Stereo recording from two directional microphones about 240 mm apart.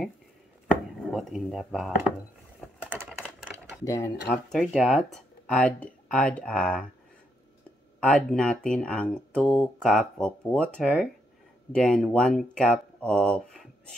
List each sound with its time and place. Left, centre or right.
0.7 s chopping: centre
2.6 s typing: centre
3.2 s typewriter: centre
3.8 s speech: centre
4.3 s speech: centre
8.0 s speech: centre